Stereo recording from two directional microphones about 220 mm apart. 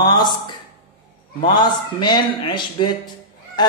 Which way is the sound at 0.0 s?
20° left (ahead or behind).